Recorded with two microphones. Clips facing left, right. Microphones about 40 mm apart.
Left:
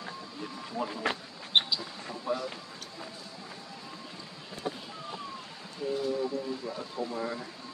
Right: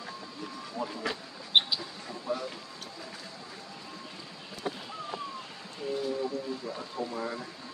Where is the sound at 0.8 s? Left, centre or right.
Left.